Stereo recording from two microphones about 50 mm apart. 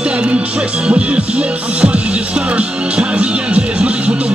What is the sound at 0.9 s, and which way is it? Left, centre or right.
Music, right.